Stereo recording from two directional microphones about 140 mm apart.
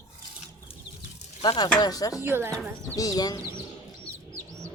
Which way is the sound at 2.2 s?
15° right (ahead or behind).